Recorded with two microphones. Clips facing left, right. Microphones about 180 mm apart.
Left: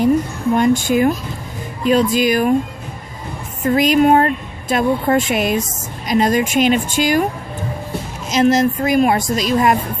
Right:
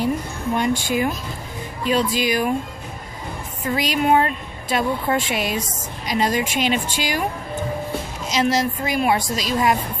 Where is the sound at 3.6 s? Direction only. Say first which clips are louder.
Left 7 dB; 50° left (ahead or behind).